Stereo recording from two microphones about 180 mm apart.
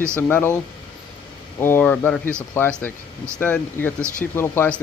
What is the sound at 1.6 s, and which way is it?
Speech, 10° left (ahead or behind).